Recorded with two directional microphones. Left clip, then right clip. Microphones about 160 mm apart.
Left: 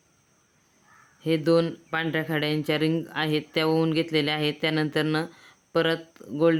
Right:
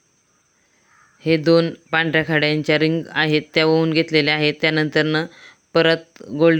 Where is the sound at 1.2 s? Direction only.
30° right (ahead or behind).